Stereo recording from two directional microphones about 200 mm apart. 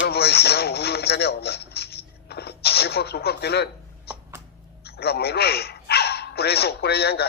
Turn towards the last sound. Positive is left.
turn(degrees=55)  # may be behind; listen again after turning